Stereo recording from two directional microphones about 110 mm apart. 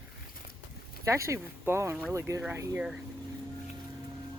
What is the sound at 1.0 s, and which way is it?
Speech, 25° right (ahead or behind).